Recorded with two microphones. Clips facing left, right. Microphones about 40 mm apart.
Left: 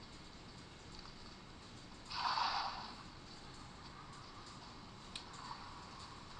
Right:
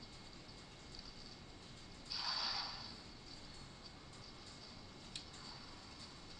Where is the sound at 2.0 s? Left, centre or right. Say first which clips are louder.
Left 7 dB; left.